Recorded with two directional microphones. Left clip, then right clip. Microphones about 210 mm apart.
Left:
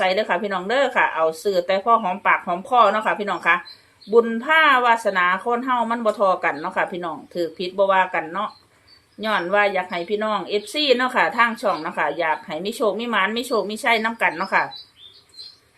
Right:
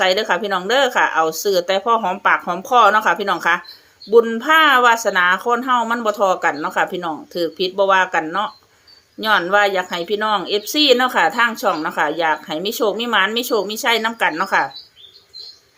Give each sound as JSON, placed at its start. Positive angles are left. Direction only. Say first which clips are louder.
{"t": 0.0, "sound": "speech", "louder": "right 3 dB", "side_deg": -35}